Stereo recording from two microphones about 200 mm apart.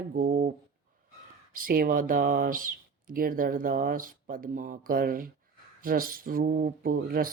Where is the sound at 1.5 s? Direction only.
45° right (ahead or behind).